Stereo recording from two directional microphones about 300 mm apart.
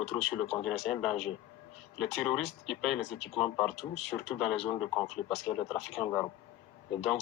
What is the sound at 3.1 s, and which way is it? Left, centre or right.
Speech, centre.